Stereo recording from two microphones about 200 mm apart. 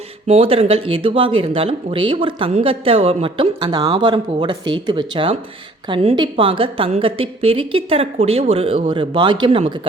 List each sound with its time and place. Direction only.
0.3 s speech: 30° right (ahead or behind)